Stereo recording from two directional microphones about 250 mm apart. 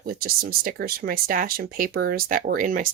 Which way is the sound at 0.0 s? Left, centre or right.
Right.